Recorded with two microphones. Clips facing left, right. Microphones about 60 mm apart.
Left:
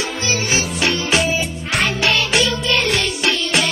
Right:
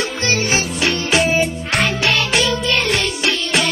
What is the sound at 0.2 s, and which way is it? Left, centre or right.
Music, right.